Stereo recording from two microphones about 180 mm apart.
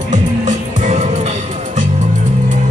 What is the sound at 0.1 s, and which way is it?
Music, 40° right (ahead or behind).